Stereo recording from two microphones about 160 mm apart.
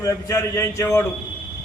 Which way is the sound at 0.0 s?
20° left (ahead or behind).